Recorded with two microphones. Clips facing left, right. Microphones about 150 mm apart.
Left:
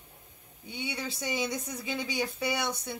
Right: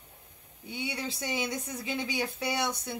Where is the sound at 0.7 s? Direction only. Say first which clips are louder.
Right 1 dB; centre (ahead or behind).